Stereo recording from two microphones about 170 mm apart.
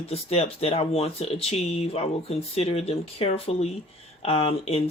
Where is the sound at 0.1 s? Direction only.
35° left (ahead or behind).